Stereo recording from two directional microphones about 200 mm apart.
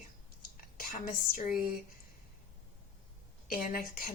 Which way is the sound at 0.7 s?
45° left (ahead or behind).